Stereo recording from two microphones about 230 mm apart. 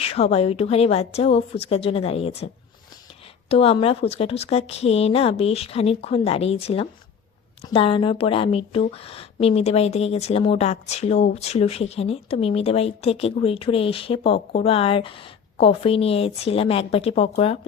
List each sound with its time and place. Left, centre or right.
0.0 s speech: left
3.5 s speech: left